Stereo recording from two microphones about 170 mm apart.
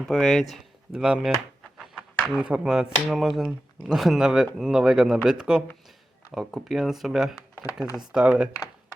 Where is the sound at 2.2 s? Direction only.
5° right (ahead or behind).